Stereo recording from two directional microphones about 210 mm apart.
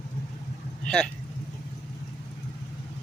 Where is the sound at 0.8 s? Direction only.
5° left (ahead or behind).